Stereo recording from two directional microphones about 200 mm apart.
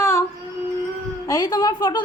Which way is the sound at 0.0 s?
15° left (ahead or behind).